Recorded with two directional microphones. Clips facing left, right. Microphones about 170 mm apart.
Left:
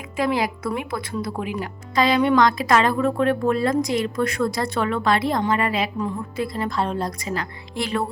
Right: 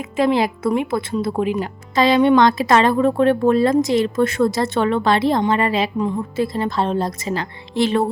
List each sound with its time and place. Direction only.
0.2 s a woman's voice: 25° right (ahead or behind)